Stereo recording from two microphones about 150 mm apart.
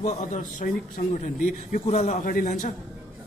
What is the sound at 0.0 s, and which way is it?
A man's voice, 55° left (ahead or behind).